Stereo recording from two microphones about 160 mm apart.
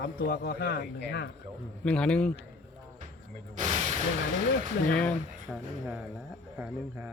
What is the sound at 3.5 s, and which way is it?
Speech, 50° right (ahead or behind).